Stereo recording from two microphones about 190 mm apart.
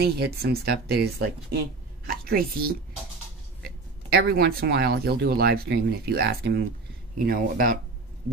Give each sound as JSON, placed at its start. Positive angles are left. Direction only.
{"t": 0.0, "sound": "a woman's voice", "side_deg": -55}